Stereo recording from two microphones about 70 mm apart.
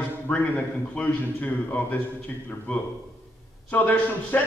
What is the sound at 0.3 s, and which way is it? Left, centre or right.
Speech, centre.